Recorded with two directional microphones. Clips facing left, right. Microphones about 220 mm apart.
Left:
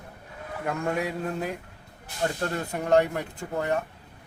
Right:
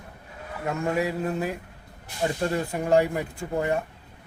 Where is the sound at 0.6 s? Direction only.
5° right (ahead or behind).